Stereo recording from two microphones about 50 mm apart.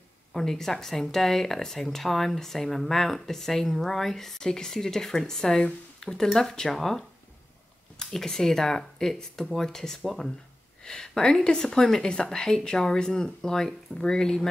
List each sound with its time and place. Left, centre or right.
0.3 s speech: centre
10.0 s speech: centre
10.8 s speech: centre